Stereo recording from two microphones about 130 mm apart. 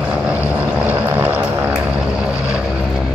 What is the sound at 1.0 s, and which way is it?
Aircraft, 15° right (ahead or behind).